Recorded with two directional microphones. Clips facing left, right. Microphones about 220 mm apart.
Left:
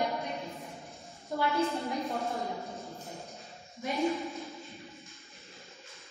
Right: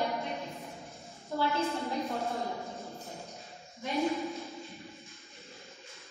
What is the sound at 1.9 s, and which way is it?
A woman's voice, centre (ahead or behind).